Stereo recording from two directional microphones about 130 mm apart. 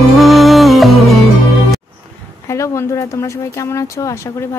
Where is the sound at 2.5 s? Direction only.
20° left (ahead or behind).